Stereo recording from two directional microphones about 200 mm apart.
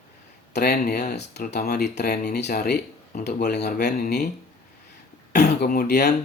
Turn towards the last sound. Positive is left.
turn(degrees=55)  # may be behind; listen again after turning